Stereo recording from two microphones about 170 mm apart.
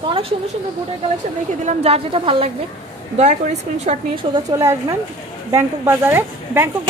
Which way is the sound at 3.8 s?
30° right (ahead or behind).